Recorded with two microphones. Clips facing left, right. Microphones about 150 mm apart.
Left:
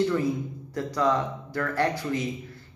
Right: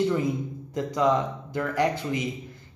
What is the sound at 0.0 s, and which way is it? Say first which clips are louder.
A man's voice: even; 20° right (ahead or behind).